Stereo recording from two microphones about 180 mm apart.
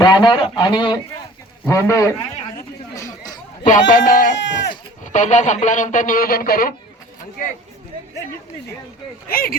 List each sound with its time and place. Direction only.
0.0 s speech: 25° left (ahead or behind)
1.6 s a man's voice: 15° left (ahead or behind)
2.9 s chatter: 20° left (ahead or behind)
3.9 s speech: 50° left (ahead or behind)
4.4 s speech: 80° left
5.0 s speech: 40° left (ahead or behind)
9.3 s speech: 55° left (ahead or behind)